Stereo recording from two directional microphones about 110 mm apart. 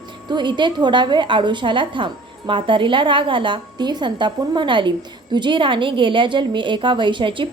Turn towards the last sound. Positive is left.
turn(degrees=-50)  # may be behind; listen again after turning